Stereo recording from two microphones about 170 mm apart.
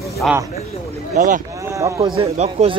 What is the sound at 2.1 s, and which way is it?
Speech, 35° right (ahead or behind).